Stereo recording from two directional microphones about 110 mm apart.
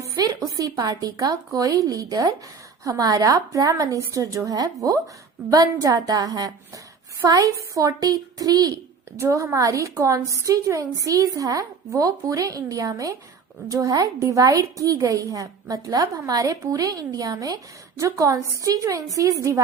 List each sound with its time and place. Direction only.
0.3 s a woman's voice: 30° right (ahead or behind)